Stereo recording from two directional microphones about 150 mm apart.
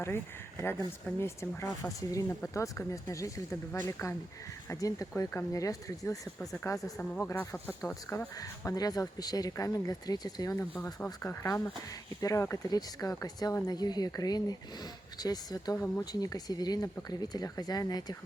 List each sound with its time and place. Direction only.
1.0 s speech: 15° left (ahead or behind)
6.4 s speech: centre (ahead or behind)
8.4 s speech: 25° left (ahead or behind)